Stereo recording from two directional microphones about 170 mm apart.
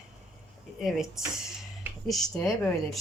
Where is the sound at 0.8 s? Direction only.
Centre (ahead or behind).